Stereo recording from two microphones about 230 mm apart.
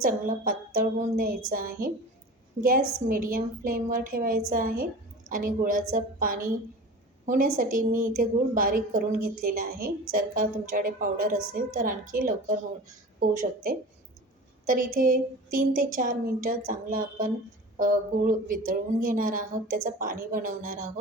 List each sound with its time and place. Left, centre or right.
0.0 s a woman's voice: right